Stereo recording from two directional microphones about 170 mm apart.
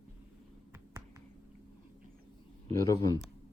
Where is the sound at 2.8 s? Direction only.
20° left (ahead or behind).